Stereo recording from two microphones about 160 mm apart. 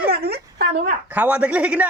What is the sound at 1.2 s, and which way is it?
Speech, 10° right (ahead or behind).